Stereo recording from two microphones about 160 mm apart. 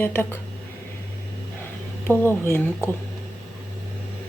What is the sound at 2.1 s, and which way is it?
Speech, 15° left (ahead or behind).